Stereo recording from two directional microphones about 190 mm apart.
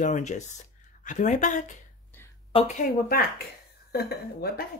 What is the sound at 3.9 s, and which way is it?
Speech, 55° left (ahead or behind).